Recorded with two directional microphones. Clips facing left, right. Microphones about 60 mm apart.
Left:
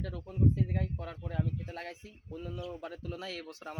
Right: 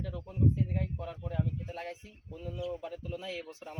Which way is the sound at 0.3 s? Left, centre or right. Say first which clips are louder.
Even; left.